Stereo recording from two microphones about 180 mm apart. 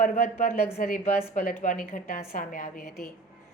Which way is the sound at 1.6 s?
50° left (ahead or behind).